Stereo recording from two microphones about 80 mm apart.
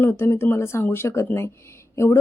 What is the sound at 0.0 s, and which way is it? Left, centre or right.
Speech, left.